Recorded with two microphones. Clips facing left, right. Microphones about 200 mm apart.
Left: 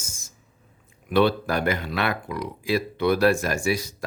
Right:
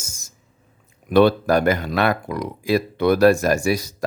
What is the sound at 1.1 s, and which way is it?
Speech, 45° right (ahead or behind).